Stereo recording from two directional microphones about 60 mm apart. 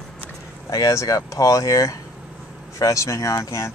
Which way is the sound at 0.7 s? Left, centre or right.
Left.